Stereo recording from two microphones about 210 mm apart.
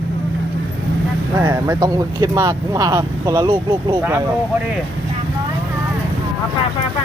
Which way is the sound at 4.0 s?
10° right (ahead or behind).